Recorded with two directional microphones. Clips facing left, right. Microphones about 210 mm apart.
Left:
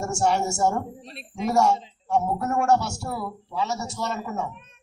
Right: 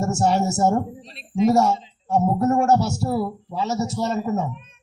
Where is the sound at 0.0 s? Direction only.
35° right (ahead or behind).